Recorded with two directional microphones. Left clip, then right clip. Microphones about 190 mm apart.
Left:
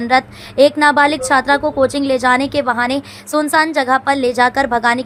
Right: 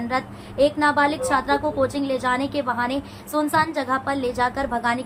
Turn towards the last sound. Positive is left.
turn(degrees=50)  # may be behind; listen again after turning